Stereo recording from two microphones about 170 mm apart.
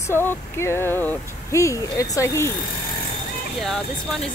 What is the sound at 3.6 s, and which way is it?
Speech, centre (ahead or behind).